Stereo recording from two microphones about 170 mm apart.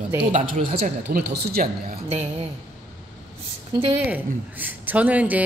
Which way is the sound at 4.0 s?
10° right (ahead or behind).